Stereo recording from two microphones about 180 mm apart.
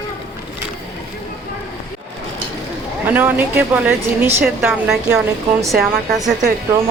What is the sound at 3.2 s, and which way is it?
Speech, 10° right (ahead or behind).